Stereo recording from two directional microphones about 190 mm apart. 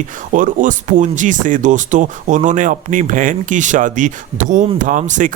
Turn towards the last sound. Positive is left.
turn(degrees=-40)  # may be behind; listen again after turning